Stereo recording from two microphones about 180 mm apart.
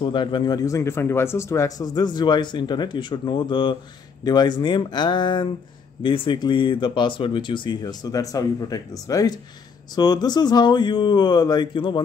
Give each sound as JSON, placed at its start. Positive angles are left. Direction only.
{"t": 0.0, "sound": "speech", "side_deg": 25}